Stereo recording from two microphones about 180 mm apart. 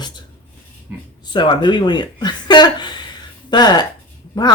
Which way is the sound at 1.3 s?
25° left (ahead or behind).